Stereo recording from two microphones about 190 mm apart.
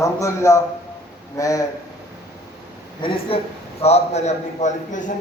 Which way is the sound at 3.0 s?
25° left (ahead or behind).